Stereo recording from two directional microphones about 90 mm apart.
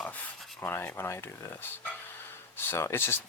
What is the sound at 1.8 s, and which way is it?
Dog, 25° left (ahead or behind).